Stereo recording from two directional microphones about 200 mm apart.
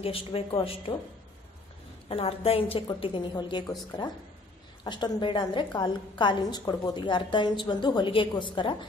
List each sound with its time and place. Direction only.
0.0 s a woman's voice: 30° left (ahead or behind)
2.0 s a woman's voice: 30° left (ahead or behind)
4.8 s a woman's voice: 20° left (ahead or behind)